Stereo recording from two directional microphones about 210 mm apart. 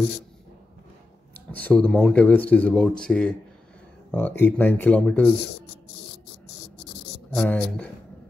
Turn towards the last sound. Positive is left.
turn(degrees=5)  # may be behind; listen again after turning